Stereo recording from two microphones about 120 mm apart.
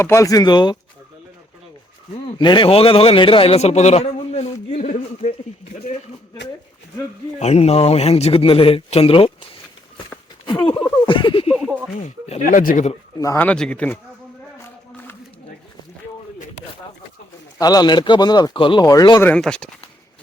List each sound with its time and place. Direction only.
0.0 s speech: 25° left (ahead or behind)
2.4 s a man's voice: 40° left (ahead or behind); by 5.3 s 85° left
7.3 s a man's voice: 65° left (ahead or behind)
10.4 s speech: 45° left (ahead or behind)
11.0 s a sound: 45° left (ahead or behind)
11.5 s a sound: 15° right (ahead or behind)
12.0 s speech: 75° left (ahead or behind); by 12.9 s 90° left
13.1 s a man's voice: 25° left (ahead or behind)
13.4 s a man's voice: 10° left (ahead or behind)
17.6 s speech: 30° left (ahead or behind)
18.9 s speech: 30° left (ahead or behind)
19.4 s a man's voice: 5° left (ahead or behind)